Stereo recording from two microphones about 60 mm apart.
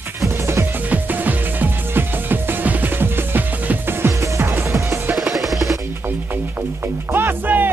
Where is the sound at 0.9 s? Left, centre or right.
Right.